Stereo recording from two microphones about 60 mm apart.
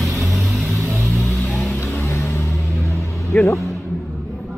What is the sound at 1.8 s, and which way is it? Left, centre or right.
Vehicle, left.